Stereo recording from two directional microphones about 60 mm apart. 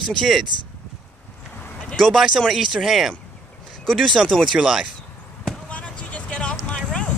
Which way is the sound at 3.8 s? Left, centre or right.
Centre.